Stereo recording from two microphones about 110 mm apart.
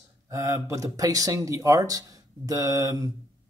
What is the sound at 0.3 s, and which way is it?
Speech, 25° right (ahead or behind).